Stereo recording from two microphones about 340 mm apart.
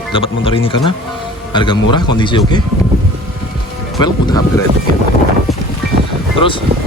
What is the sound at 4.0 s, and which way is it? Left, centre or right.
Speech, centre.